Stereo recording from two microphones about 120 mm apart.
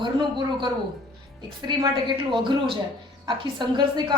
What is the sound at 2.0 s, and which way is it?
A woman's voice, 40° right (ahead or behind).